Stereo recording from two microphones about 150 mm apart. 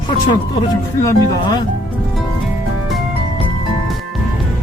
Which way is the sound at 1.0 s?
20° left (ahead or behind).